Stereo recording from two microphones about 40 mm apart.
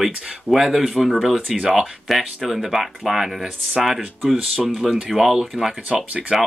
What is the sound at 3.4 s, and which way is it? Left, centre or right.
Speech, centre.